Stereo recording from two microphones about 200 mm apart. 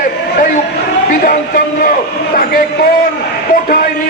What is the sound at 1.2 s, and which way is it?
A man's voice, 45° left (ahead or behind).